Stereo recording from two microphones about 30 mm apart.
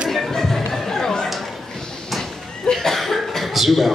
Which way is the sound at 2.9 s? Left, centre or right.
Centre.